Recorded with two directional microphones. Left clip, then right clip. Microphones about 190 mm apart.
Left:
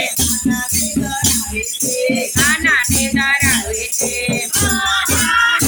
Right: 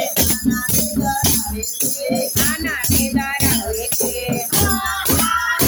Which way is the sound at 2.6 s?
10° right (ahead or behind).